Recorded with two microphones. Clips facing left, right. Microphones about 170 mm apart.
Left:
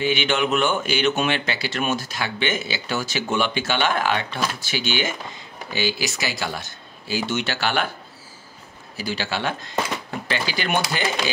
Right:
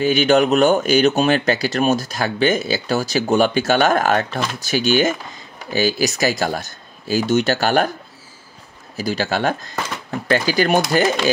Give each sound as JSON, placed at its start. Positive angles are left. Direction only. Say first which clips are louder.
{"t": 0.0, "sound": "speech", "louder": "right 7 dB", "side_deg": -40}
{"t": 8.9, "sound": "speech", "louder": "right 6 dB", "side_deg": -40}